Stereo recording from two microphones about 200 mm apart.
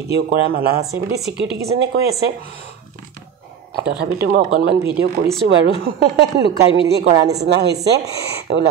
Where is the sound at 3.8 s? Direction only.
55° right (ahead or behind).